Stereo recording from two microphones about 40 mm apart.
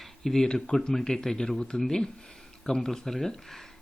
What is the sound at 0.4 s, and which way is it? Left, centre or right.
Speech, left.